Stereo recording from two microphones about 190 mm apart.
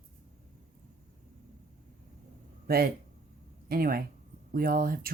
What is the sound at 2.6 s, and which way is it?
Speech, 50° right (ahead or behind).